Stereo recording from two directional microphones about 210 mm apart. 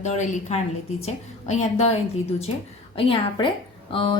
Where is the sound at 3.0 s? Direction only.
25° left (ahead or behind).